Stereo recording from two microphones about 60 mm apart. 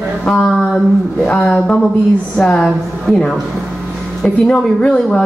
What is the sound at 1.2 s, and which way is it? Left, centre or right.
Speech, left.